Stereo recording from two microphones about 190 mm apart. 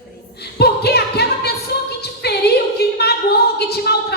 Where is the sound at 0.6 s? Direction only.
60° left (ahead or behind).